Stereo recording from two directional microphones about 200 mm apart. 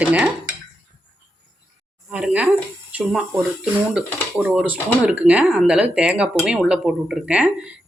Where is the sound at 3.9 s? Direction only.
5° right (ahead or behind).